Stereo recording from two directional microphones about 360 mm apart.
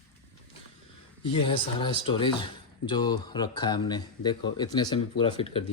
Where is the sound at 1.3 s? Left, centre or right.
Centre.